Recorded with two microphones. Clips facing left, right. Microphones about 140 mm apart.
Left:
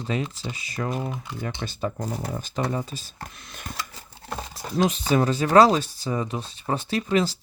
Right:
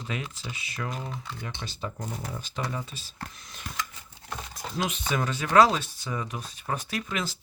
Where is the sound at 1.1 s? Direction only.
15° left (ahead or behind).